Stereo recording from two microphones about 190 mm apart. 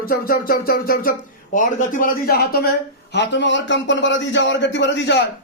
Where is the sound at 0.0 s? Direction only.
50° left (ahead or behind).